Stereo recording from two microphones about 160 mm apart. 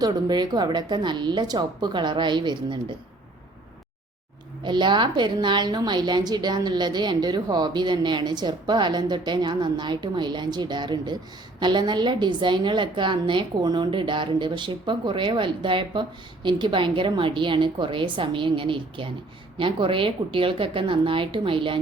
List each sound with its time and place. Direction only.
0.0 s a woman's voice: 25° right (ahead or behind)
4.6 s a woman's voice: 30° right (ahead or behind)